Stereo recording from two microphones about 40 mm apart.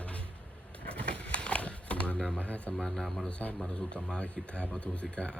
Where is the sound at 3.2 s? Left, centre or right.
Left.